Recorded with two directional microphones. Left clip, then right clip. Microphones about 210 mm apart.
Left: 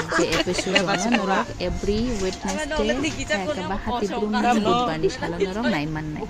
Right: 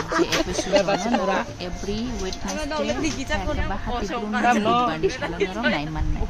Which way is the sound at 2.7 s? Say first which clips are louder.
Left 1 dB; 55° right (ahead or behind).